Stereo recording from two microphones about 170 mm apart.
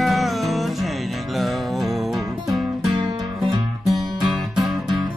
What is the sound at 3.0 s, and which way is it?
Music, 25° right (ahead or behind).